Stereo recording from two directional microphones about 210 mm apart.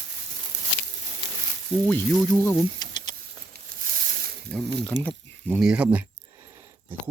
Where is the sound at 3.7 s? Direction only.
40° right (ahead or behind).